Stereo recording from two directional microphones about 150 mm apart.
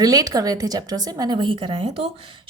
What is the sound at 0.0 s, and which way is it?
A woman's voice, 25° right (ahead or behind).